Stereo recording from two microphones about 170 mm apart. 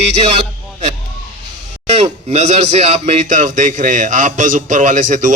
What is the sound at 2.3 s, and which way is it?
A man's voice, 40° right (ahead or behind).